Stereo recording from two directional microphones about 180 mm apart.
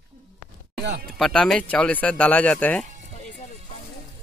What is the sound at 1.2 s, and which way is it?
Speech, 5° left (ahead or behind).